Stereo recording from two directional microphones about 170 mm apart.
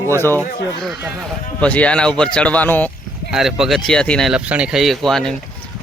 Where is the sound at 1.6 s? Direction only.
10° left (ahead or behind).